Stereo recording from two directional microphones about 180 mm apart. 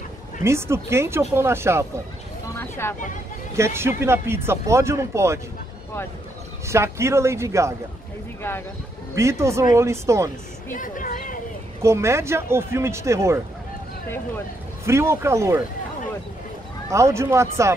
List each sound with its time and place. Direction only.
0.4 s speech: 15° right (ahead or behind)
2.6 s vehicle: 15° left (ahead or behind)
3.5 s speech: 15° right (ahead or behind)
6.7 s speech: 15° right (ahead or behind)
8.4 s speech: 10° left (ahead or behind)
9.1 s speech: 15° right (ahead or behind)
10.7 s speech: 50° left (ahead or behind)
11.8 s speech: 15° right (ahead or behind)
14.9 s speech: 15° right (ahead or behind)
16.9 s speech: 15° right (ahead or behind)